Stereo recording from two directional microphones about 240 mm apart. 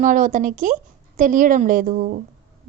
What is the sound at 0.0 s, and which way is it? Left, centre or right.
Speech, right.